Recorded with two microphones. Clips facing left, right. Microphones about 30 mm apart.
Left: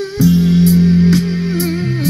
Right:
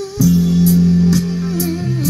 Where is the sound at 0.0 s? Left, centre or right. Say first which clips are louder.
Left 2 dB; left.